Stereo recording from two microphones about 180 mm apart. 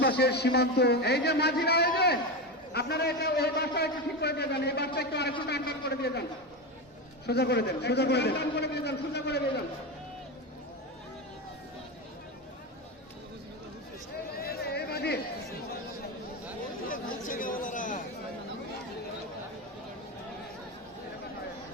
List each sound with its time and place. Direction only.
0.0 s a man's voice: 65° left (ahead or behind)
7.3 s a man's voice: 65° left (ahead or behind)
14.3 s a sound: 55° left (ahead or behind)
16.9 s chatter: 50° left (ahead or behind)